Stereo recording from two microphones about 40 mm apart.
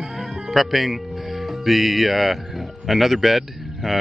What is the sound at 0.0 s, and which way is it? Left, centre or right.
Speech, centre.